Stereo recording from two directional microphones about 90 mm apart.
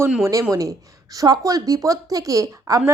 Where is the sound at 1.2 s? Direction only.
40° right (ahead or behind).